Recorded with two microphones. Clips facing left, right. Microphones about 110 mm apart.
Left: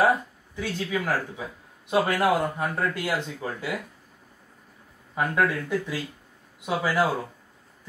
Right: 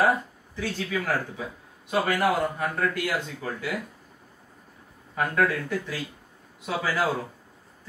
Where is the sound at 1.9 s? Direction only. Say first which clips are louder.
Left 1 dB; 20° left (ahead or behind).